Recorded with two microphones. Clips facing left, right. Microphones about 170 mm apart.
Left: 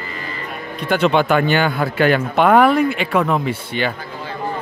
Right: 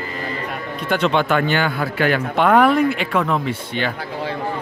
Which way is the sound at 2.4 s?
5° left (ahead or behind).